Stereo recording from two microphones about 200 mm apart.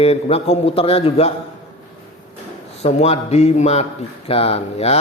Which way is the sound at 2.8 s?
30° left (ahead or behind).